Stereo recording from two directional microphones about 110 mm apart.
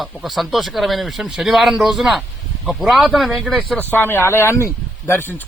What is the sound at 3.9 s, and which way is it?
Speech, 20° left (ahead or behind).